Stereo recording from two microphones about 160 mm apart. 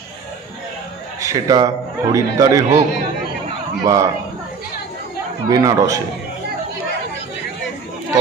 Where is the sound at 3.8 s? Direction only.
20° right (ahead or behind).